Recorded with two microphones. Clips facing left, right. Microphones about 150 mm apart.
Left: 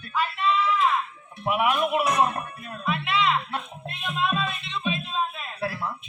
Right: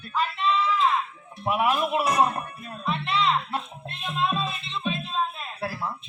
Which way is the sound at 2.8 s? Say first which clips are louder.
Even; centre (ahead or behind).